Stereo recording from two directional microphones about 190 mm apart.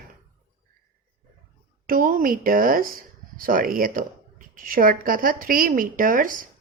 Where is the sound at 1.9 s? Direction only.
45° right (ahead or behind).